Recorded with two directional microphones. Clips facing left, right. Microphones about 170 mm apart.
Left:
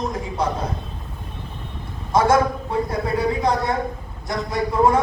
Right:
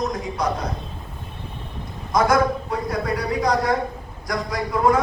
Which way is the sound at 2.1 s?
25° left (ahead or behind).